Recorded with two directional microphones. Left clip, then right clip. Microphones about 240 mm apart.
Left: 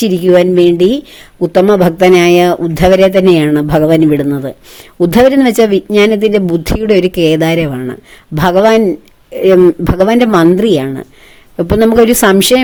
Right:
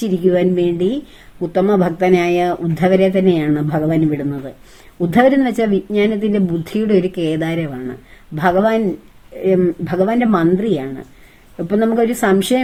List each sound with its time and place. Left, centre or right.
0.0 s a woman's voice: left